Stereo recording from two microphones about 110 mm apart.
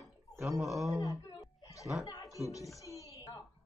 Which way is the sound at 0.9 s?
35° left (ahead or behind).